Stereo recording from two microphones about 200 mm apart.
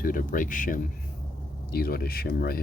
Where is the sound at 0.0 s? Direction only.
45° left (ahead or behind).